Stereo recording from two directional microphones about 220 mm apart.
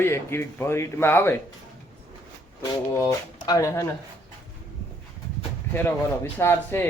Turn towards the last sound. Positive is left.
turn(degrees=10)  # may be behind; listen again after turning